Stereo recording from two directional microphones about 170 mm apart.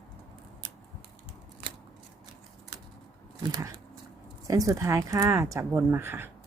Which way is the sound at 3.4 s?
20° right (ahead or behind).